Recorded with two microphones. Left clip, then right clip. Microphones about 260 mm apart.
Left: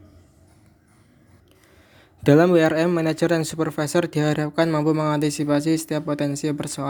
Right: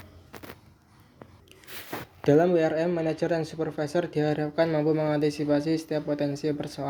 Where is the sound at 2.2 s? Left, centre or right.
Left.